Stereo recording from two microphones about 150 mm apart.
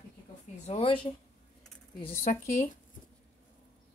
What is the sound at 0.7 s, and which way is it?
Speech, 40° left (ahead or behind).